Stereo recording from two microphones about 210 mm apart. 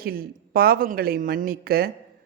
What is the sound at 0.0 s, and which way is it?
A man's voice, 45° right (ahead or behind).